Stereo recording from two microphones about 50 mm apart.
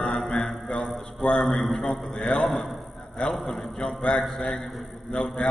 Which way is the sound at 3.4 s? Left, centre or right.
Centre.